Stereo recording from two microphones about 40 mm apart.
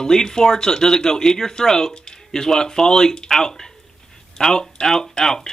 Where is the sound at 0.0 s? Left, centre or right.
Centre.